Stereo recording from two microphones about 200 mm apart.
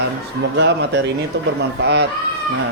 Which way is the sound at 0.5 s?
60° right (ahead or behind).